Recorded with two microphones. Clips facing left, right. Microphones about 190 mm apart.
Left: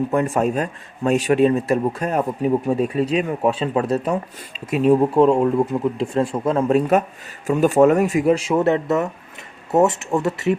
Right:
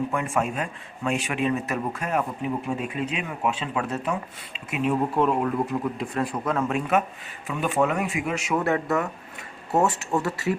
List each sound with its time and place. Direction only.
0.1 s a man's voice: 40° left (ahead or behind); by 10.6 s 20° left (ahead or behind)